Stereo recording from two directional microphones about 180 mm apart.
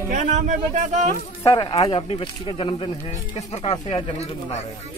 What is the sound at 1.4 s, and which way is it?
Speech, 20° left (ahead or behind).